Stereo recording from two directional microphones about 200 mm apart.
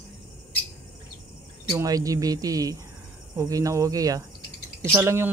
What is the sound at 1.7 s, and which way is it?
A man's voice, 15° right (ahead or behind).